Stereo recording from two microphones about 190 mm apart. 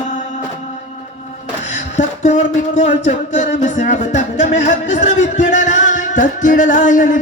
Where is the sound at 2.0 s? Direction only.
35° left (ahead or behind).